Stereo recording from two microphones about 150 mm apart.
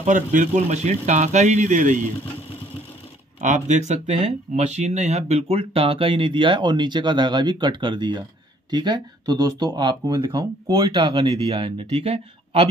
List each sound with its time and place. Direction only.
0.0 s speech: 55° right (ahead or behind)
3.3 s speech: 55° right (ahead or behind)